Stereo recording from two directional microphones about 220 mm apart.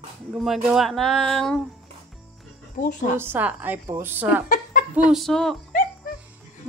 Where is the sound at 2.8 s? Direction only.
35° left (ahead or behind).